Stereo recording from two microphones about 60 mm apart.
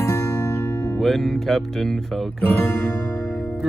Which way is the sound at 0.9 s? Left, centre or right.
Centre.